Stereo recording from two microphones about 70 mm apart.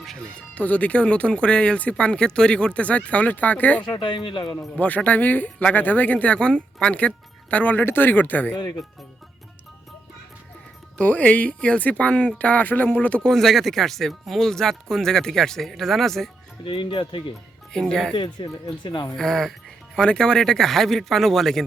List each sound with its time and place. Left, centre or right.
0.0 s music: centre
0.3 s speech: centre
10.9 s speech: left
13.2 s speech: centre
17.7 s speech: centre
18.4 s speech: left
19.1 s speech: centre